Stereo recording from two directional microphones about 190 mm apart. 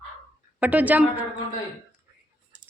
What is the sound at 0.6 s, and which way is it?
Speech, 10° right (ahead or behind).